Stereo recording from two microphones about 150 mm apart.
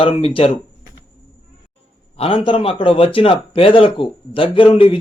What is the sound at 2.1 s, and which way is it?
A man's voice, 40° left (ahead or behind).